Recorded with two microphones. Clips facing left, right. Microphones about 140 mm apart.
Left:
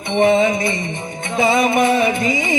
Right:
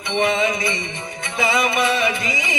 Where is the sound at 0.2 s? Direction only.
50° left (ahead or behind).